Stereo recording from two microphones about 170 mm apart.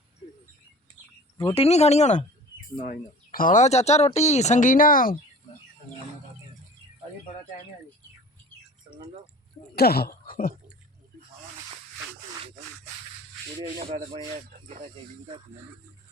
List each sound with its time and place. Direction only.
1.5 s speech: 40° left (ahead or behind)
2.8 s speech: 55° left (ahead or behind)
8.9 s drip: 30° right (ahead or behind)
9.7 s speech: 65° left (ahead or behind)
13.9 s a sound: 35° right (ahead or behind)